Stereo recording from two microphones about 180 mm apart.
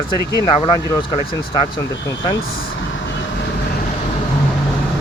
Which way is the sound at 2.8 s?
90° left.